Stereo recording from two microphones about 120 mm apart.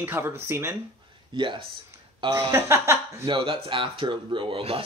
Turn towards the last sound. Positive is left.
turn(degrees=-50)  # may be behind; listen again after turning